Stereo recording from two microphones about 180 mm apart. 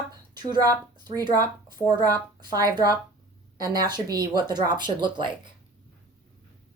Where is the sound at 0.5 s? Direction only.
20° right (ahead or behind).